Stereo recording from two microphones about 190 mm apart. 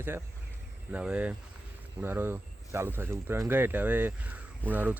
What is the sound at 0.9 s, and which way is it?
Speech, 5° right (ahead or behind).